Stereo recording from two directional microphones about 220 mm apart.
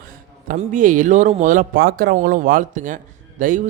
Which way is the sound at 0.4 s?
35° right (ahead or behind).